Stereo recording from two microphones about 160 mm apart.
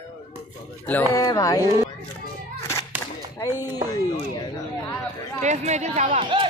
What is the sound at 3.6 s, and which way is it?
Speech, 25° left (ahead or behind).